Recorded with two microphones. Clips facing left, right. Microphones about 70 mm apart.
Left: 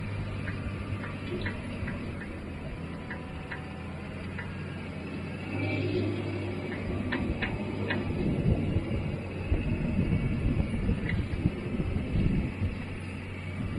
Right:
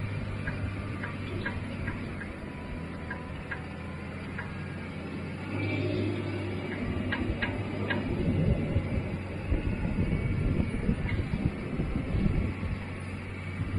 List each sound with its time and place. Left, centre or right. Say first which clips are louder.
5.5 s vehicle: left 1 dB; right
6.5 s a sound: even; right
7.4 s tick-tock: even; centre